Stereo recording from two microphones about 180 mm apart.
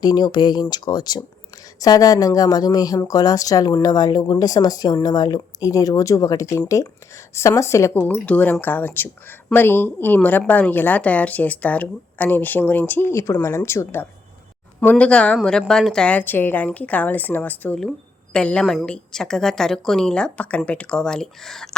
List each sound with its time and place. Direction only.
0.0 s a woman's voice: 25° left (ahead or behind); by 21.8 s centre (ahead or behind)